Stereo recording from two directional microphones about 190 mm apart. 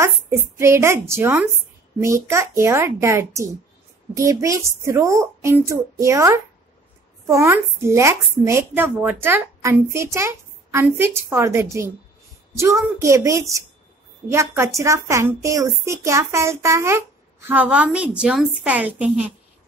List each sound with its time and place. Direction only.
0.0 s speech: 15° right (ahead or behind)